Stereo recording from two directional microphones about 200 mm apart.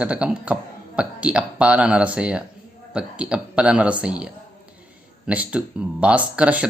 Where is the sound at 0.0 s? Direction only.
5° right (ahead or behind).